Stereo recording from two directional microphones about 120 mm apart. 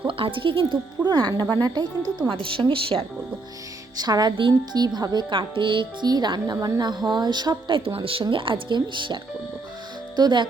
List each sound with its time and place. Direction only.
0.1 s speech: 45° right (ahead or behind)
2.3 s speech: 45° right (ahead or behind)
3.9 s speech: 35° right (ahead or behind)
10.2 s speech: 35° right (ahead or behind)